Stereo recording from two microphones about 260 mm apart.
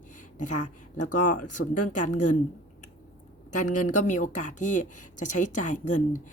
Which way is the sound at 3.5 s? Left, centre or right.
Left.